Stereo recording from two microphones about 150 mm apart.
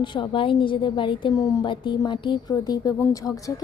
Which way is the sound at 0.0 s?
35° left (ahead or behind).